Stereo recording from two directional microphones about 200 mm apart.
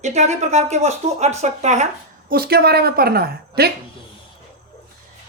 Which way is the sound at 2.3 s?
50° right (ahead or behind).